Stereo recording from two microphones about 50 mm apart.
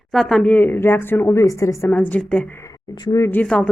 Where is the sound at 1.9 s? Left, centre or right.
Left.